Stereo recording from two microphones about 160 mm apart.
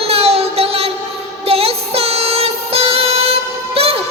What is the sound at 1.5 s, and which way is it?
Music, 40° right (ahead or behind).